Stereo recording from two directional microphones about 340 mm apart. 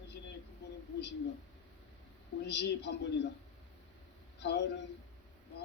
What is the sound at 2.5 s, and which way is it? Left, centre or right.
Speech, left.